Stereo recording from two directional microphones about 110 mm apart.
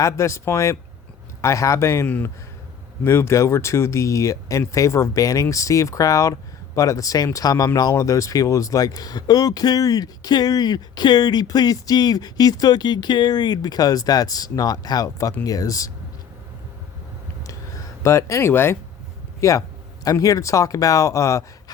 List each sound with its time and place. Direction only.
0.0 s speech: 25° left (ahead or behind)
2.0 s speech: 15° left (ahead or behind); by 15.9 s 30° left (ahead or behind)
18.0 s speech: 25° left (ahead or behind)